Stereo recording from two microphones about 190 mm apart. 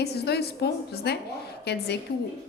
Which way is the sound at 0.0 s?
60° left (ahead or behind).